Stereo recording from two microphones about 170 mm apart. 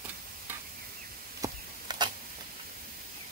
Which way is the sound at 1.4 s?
25° right (ahead or behind).